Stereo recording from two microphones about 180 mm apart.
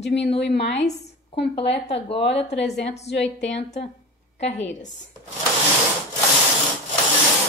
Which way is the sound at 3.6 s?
40° left (ahead or behind).